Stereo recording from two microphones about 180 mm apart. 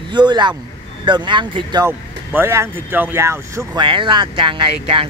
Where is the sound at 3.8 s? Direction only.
25° right (ahead or behind).